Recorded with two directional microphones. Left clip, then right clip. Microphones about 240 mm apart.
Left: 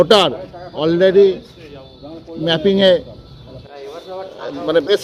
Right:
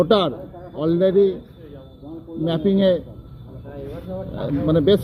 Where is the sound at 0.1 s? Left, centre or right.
Centre.